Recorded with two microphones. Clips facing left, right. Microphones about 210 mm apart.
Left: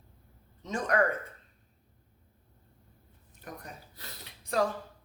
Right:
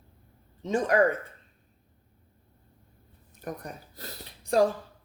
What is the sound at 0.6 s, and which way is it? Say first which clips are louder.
Speech: right 5 dB; 30° right (ahead or behind).